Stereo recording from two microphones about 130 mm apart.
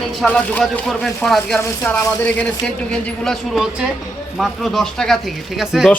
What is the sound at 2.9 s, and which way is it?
Speech, centre (ahead or behind).